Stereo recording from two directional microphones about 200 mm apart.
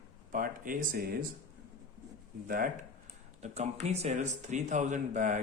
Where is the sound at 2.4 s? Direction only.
45° right (ahead or behind).